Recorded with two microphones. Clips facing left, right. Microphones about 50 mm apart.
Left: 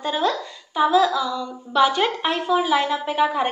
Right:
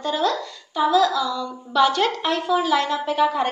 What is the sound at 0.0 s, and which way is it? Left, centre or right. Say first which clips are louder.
Speech: even; left.